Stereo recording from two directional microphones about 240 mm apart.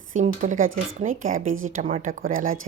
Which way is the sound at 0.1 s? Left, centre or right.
Right.